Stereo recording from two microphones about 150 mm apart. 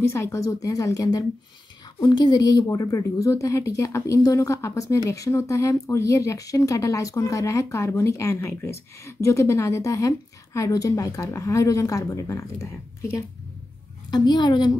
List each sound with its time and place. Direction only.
0.0 s a woman's voice: 20° left (ahead or behind)
14.1 s a woman's voice: 30° left (ahead or behind)